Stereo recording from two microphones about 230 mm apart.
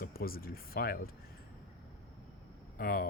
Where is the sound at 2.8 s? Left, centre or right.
Left.